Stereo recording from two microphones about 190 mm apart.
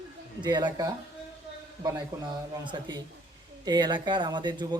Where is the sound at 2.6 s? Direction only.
25° right (ahead or behind).